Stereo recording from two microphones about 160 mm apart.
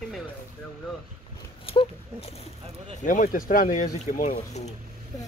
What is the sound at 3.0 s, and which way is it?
Speech, 55° left (ahead or behind).